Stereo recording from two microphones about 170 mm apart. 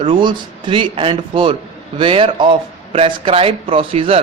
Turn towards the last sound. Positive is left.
turn(degrees=-35)  # may be behind; listen again after turning